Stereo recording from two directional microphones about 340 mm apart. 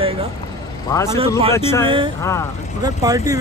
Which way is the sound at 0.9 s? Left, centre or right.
Centre.